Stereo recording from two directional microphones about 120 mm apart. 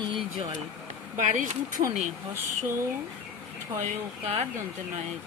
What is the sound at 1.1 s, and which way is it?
Speech, 90° right.